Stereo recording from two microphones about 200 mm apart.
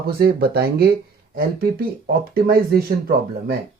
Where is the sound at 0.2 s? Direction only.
50° right (ahead or behind).